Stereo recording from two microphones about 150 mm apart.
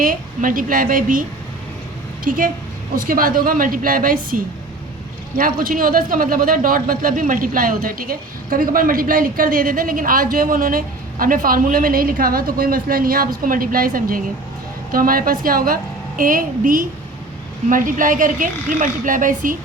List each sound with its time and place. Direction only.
0.0 s speech: 65° right (ahead or behind)
2.2 s speech: 65° right (ahead or behind)
5.4 s speech: 65° right (ahead or behind)